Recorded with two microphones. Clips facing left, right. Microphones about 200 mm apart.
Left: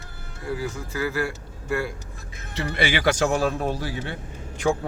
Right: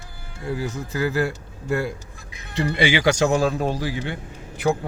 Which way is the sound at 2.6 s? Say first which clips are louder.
Right 4 dB; 15° right (ahead or behind).